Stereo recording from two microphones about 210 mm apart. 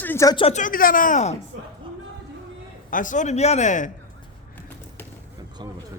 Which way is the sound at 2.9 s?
40° left (ahead or behind).